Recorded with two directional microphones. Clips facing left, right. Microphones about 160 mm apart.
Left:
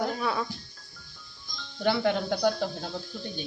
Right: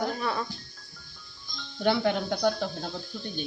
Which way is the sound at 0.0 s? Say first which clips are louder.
Left 1 dB; centre (ahead or behind).